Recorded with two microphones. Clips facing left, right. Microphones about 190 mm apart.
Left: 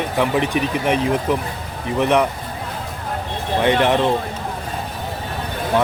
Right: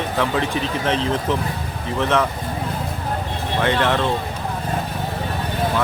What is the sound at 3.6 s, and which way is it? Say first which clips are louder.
Speech: left 3 dB; 20° left (ahead or behind).